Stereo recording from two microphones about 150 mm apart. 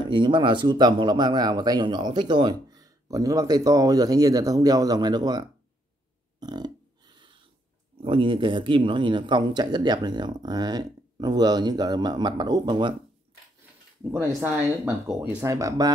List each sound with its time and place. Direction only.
0.1 s speech: 30° right (ahead or behind)
6.4 s a sound: 30° right (ahead or behind)
8.0 s speech: 35° right (ahead or behind)
14.4 s speech: 10° right (ahead or behind)
15.4 s speech: 20° right (ahead or behind)